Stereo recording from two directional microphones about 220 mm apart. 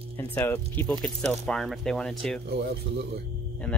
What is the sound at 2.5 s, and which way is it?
Speech, 45° right (ahead or behind).